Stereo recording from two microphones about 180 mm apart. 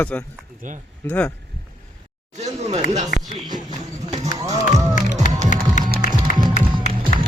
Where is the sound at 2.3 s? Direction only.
40° right (ahead or behind).